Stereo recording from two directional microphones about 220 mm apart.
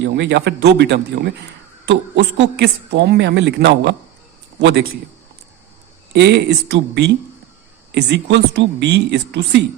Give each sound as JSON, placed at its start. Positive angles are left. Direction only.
{"t": 0.0, "sound": "a man's voice", "side_deg": -50}
{"t": 6.1, "sound": "a man's voice", "side_deg": -50}